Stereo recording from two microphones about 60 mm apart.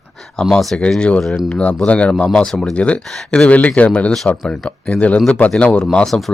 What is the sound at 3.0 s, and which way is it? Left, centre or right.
Speech, centre.